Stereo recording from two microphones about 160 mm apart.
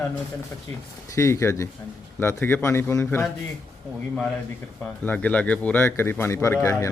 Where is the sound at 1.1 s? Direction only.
20° left (ahead or behind).